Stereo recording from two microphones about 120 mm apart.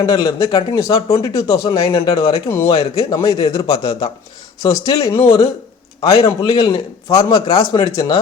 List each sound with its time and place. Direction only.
0.0 s a man's voice: 30° left (ahead or behind)
1.9 s speech: 50° left (ahead or behind)
2.1 s a man's voice: 25° left (ahead or behind)